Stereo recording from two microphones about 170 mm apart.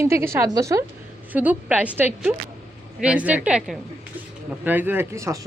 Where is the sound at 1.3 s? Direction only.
10° right (ahead or behind).